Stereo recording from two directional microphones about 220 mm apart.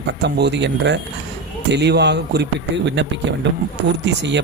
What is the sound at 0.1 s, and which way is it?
Speech, 50° right (ahead or behind).